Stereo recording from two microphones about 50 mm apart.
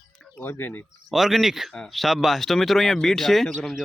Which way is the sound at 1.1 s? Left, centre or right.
Centre.